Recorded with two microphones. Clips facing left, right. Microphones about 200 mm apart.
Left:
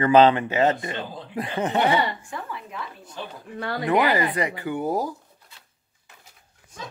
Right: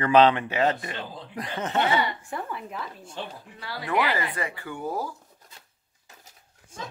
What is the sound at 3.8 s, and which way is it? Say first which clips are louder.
Speech: left 5 dB; 40° left (ahead or behind).